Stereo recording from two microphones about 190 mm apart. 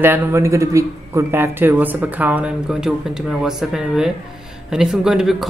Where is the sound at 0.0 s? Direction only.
10° right (ahead or behind).